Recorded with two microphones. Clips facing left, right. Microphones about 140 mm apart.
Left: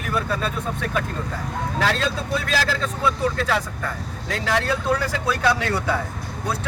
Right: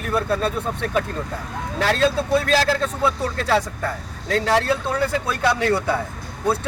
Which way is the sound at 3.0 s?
30° right (ahead or behind).